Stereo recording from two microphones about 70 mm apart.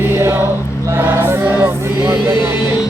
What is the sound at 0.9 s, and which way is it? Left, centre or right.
Choir, right.